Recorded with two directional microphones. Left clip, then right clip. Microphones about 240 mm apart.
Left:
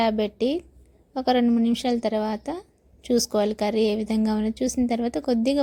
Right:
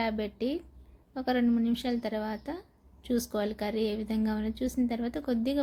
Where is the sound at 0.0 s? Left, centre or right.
Left.